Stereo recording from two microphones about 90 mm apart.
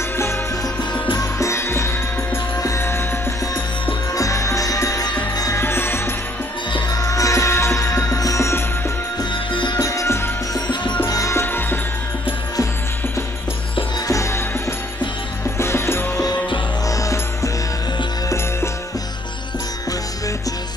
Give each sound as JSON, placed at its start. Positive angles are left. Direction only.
{"t": 1.4, "sound": "music", "side_deg": 30}
{"t": 4.1, "sound": "music", "side_deg": 35}
{"t": 5.6, "sound": "music", "side_deg": 25}
{"t": 6.9, "sound": "music", "side_deg": 40}
{"t": 9.2, "sound": "music", "side_deg": 60}
{"t": 9.8, "sound": "music", "side_deg": 35}
{"t": 10.5, "sound": "music", "side_deg": 55}
{"t": 11.1, "sound": "music", "side_deg": 40}
{"t": 11.4, "sound": "music", "side_deg": 25}
{"t": 14.0, "sound": "music", "side_deg": 35}
{"t": 15.5, "sound": "music", "side_deg": 30}